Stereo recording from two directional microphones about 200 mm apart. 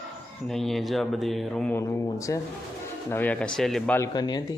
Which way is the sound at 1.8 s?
15° left (ahead or behind).